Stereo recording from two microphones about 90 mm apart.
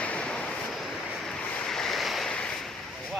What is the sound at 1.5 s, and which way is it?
Waves, 5° left (ahead or behind).